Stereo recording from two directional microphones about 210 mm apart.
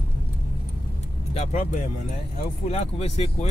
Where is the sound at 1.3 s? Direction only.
30° left (ahead or behind).